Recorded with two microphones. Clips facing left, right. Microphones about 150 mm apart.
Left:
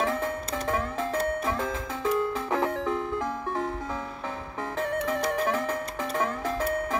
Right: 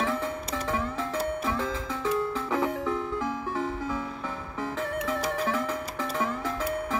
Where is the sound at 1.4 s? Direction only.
15° left (ahead or behind).